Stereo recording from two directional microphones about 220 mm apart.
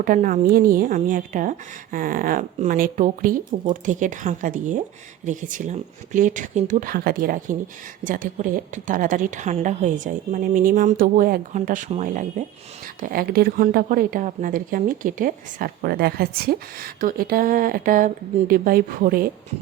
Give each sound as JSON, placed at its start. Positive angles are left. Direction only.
{"t": 0.0, "sound": "a woman's voice", "side_deg": -40}